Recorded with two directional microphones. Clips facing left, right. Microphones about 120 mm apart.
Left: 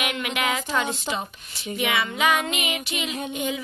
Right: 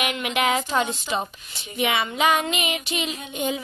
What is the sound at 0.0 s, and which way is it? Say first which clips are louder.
A woman's voice: right 3 dB; 25° right (ahead or behind).